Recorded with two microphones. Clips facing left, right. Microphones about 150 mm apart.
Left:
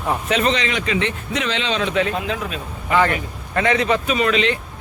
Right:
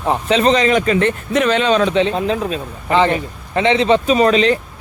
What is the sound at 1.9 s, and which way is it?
A man's voice, 30° right (ahead or behind).